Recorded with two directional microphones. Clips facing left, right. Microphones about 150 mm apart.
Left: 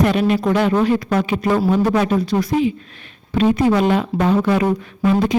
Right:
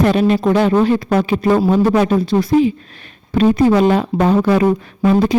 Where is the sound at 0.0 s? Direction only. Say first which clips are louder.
Right 3 dB; 35° right (ahead or behind).